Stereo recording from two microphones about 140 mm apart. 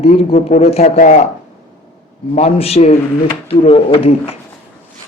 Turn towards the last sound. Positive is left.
turn(degrees=45)  # may be behind; listen again after turning